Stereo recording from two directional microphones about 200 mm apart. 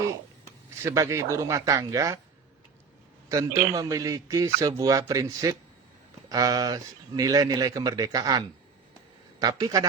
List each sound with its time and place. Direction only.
0.9 s a man's voice: 15° right (ahead or behind)
3.2 s a man's voice: 15° right (ahead or behind)